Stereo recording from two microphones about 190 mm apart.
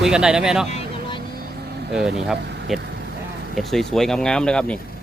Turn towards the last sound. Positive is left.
turn(degrees=5)  # may be behind; listen again after turning